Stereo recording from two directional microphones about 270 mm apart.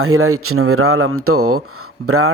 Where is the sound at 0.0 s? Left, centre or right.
Right.